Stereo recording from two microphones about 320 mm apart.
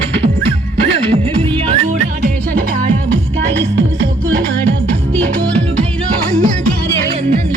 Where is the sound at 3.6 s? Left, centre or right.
Right.